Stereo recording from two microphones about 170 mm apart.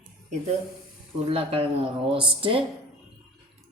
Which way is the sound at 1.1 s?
35° right (ahead or behind).